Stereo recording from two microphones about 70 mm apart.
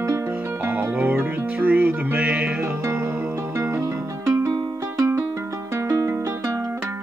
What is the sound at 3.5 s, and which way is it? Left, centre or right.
Music, right.